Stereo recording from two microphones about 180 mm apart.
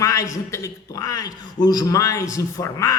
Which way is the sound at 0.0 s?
15° left (ahead or behind).